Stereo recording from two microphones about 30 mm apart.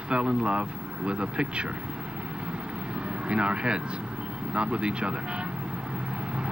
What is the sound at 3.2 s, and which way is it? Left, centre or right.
Speech, right.